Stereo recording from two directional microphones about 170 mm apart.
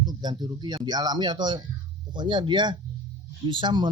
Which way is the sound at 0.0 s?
25° right (ahead or behind).